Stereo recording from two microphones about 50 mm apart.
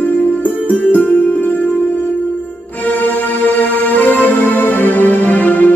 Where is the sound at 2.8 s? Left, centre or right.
Left.